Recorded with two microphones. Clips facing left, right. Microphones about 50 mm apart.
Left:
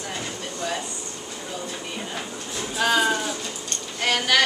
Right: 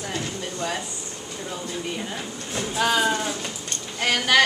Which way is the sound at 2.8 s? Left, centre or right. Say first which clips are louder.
Left 1 dB; centre.